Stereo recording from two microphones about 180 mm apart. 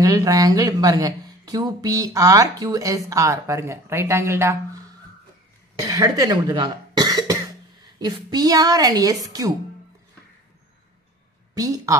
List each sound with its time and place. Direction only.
0.0 s speech: 20° right (ahead or behind)
11.5 s speech: 20° right (ahead or behind)